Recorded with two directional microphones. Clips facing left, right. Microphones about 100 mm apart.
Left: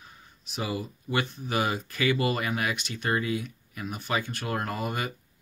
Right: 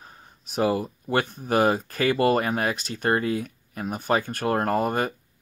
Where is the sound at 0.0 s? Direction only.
40° right (ahead or behind).